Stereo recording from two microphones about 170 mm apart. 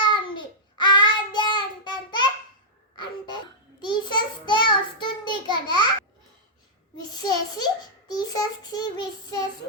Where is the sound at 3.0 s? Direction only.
25° left (ahead or behind).